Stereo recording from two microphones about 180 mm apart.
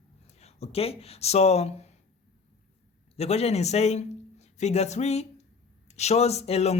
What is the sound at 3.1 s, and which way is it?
A man's voice, 35° left (ahead or behind).